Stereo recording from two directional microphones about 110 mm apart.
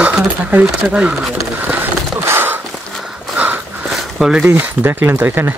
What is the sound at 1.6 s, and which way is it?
Horse, 20° right (ahead or behind).